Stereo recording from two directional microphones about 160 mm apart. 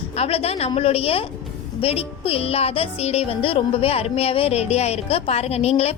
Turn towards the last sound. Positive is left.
turn(degrees=40)  # may be behind; listen again after turning